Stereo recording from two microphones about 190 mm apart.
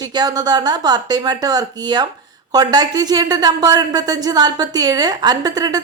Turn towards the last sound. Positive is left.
turn(degrees=-20)  # may be behind; listen again after turning